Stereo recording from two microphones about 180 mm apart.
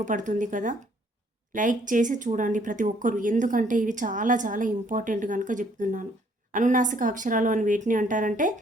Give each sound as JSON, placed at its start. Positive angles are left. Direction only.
{"t": 0.0, "sound": "speech", "side_deg": -45}